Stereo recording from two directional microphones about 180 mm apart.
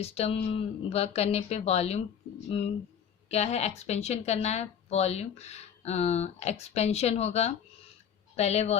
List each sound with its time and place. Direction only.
0.0 s a woman's voice: 35° left (ahead or behind)